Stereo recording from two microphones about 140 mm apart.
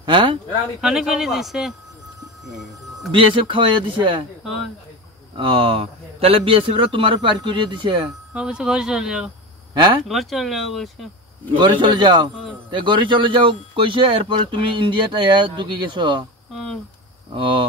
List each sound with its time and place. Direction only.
0.0 s speech: 35° right (ahead or behind)
0.7 s speech: 5° right (ahead or behind)
3.1 s speech: 35° right (ahead or behind)
5.3 s speech: 40° right (ahead or behind)
8.3 s speech: 5° right (ahead or behind)
11.5 s speech: 35° right (ahead or behind)
17.3 s speech: 40° right (ahead or behind)